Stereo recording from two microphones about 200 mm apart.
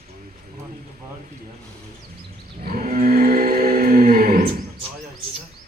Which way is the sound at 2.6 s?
45° right (ahead or behind).